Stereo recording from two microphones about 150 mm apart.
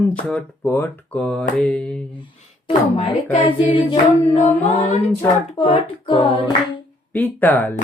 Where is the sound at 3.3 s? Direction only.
10° left (ahead or behind).